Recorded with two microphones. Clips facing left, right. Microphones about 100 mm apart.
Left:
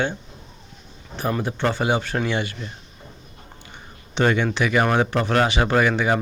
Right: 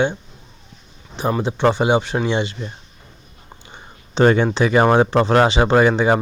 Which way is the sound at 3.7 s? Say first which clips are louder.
Right 4 dB; 35° right (ahead or behind).